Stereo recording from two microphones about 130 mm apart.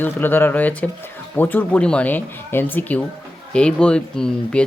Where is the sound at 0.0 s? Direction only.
15° left (ahead or behind).